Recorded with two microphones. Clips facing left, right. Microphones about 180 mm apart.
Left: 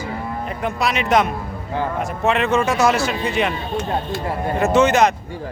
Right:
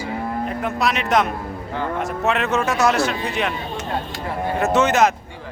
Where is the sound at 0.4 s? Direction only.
Centre (ahead or behind).